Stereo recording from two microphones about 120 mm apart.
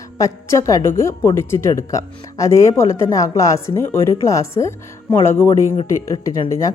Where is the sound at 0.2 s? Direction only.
25° left (ahead or behind).